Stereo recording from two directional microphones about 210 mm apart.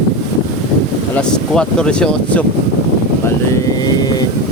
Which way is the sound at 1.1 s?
5° left (ahead or behind).